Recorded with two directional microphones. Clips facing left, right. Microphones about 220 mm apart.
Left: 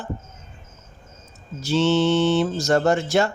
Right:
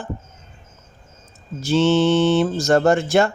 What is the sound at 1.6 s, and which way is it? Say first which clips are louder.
Speech: right 3 dB; 50° right (ahead or behind).